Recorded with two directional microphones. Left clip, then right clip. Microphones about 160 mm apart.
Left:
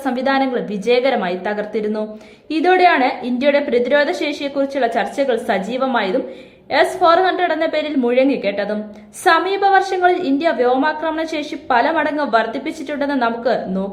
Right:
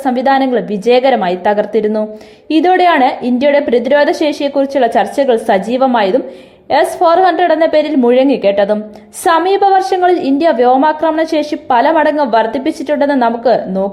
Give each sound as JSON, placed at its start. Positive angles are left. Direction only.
{"t": 0.0, "sound": "a woman's voice", "side_deg": -30}